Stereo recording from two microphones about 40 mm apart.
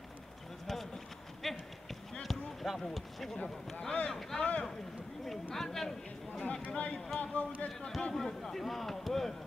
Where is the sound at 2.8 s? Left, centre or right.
Centre.